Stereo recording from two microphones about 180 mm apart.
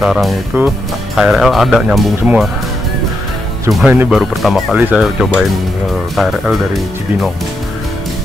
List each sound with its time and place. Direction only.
0.0 s speech: centre (ahead or behind)
3.7 s speech: 5° right (ahead or behind)